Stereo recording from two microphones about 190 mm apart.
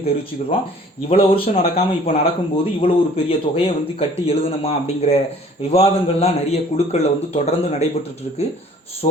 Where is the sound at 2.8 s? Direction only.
30° left (ahead or behind).